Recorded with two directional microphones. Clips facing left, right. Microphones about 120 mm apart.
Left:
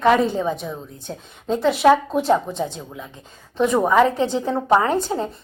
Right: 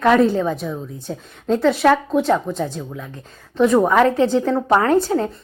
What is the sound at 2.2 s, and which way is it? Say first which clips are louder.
Speech: even; 25° left (ahead or behind).